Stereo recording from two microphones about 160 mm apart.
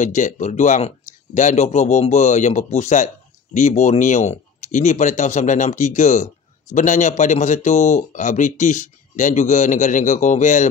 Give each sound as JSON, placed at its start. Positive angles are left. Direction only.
{"t": 0.0, "sound": "a man's voice", "side_deg": 50}